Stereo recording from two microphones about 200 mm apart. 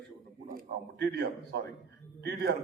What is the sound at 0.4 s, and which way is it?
A man's voice, 50° right (ahead or behind).